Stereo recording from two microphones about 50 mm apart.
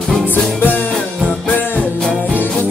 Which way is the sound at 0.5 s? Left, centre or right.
Left.